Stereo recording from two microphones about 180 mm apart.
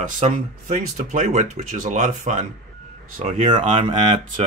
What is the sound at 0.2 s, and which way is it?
Speech, 45° right (ahead or behind).